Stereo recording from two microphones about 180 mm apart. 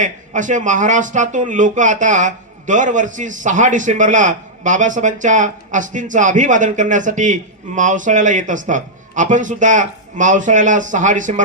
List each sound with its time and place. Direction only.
0.0 s speech: 45° right (ahead or behind)